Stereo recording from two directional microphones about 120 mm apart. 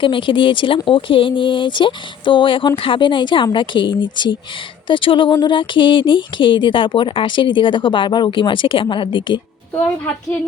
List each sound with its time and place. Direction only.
0.0 s speech: 45° left (ahead or behind)